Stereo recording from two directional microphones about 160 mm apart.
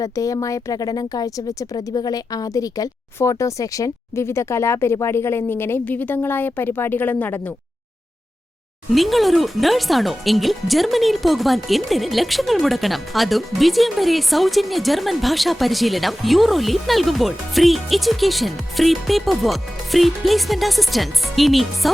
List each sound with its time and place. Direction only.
0.0 s speech: 20° left (ahead or behind)
8.9 s speech: centre (ahead or behind)